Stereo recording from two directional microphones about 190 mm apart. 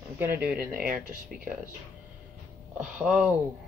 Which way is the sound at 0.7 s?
50° right (ahead or behind).